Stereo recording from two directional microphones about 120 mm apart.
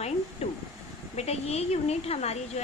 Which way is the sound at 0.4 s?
60° left (ahead or behind).